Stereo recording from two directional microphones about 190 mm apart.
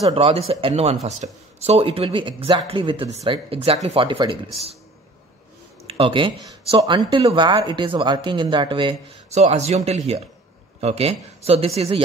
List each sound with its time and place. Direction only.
0.0 s speech: 30° right (ahead or behind)
5.9 s speech: 30° right (ahead or behind)